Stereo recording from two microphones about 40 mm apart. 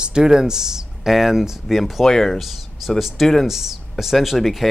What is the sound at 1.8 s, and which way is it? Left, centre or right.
Speech, centre.